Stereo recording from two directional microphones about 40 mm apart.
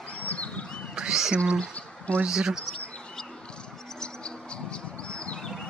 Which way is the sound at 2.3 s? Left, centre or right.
Centre.